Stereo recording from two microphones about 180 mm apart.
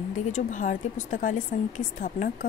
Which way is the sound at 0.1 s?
45° left (ahead or behind).